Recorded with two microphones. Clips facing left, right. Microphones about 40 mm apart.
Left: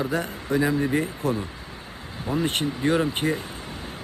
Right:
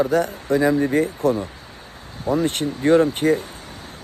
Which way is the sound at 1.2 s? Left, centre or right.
Right.